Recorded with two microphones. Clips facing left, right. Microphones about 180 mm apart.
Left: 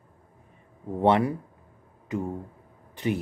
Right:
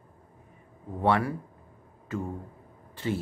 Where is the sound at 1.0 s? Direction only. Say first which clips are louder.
Left 4 dB; 20° left (ahead or behind).